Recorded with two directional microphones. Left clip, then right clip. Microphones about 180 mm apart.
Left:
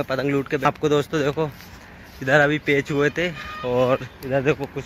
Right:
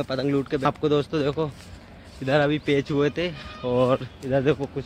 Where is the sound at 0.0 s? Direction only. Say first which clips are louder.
Left 2 dB; centre (ahead or behind).